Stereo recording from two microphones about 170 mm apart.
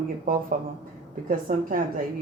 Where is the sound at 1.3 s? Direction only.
50° right (ahead or behind).